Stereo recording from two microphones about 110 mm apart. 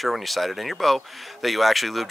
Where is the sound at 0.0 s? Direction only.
Centre (ahead or behind).